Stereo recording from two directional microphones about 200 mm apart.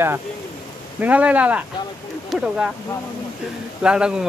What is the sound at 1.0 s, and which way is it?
Speech, 5° right (ahead or behind).